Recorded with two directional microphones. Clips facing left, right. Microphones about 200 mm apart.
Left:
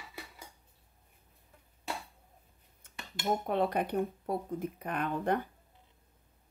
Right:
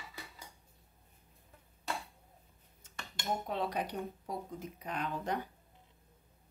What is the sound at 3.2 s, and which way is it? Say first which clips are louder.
Speech: left 6 dB; 55° left (ahead or behind).